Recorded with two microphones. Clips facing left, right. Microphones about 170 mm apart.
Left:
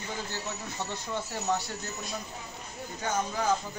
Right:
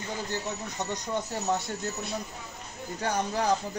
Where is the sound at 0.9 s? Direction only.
20° right (ahead or behind).